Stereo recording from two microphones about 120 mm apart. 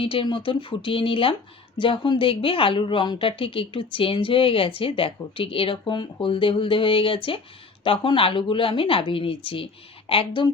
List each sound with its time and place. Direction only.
0.0 s speech: 50° left (ahead or behind)